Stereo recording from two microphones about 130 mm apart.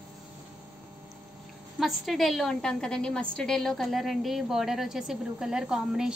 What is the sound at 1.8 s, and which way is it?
A woman's voice, centre (ahead or behind).